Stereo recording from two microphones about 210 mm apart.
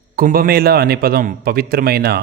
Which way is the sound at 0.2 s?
45° right (ahead or behind).